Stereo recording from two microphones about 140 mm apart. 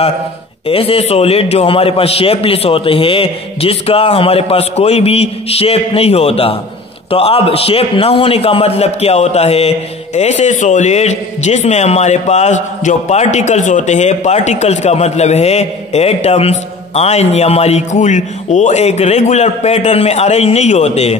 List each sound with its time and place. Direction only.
0.7 s a man's voice: 45° left (ahead or behind)